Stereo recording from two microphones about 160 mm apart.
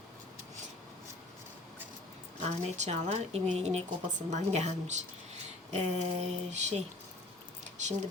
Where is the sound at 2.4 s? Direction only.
45° right (ahead or behind).